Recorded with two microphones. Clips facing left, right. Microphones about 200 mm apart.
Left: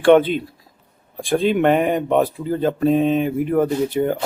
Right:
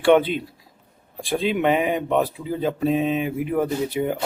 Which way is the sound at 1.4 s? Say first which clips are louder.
Left 4 dB; 50° left (ahead or behind).